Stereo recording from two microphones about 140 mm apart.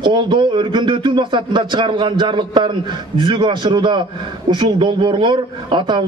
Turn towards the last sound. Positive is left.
turn(degrees=-35)  # may be behind; listen again after turning